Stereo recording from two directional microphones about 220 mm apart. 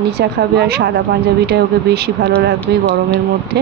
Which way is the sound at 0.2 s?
50° right (ahead or behind).